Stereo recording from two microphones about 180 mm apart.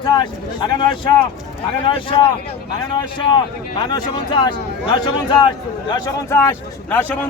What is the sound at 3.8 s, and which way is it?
A man's voice, 25° left (ahead or behind).